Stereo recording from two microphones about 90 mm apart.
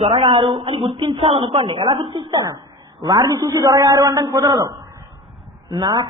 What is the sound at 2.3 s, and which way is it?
A man's voice, 50° right (ahead or behind).